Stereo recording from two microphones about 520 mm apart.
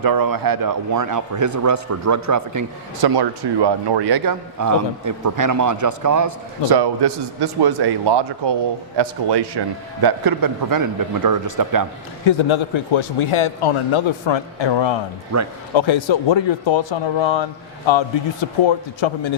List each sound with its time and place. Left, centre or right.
0.0 s a man's voice: right
6.7 s a man's voice: right
12.2 s speech: left
15.3 s speech: right
15.7 s speech: left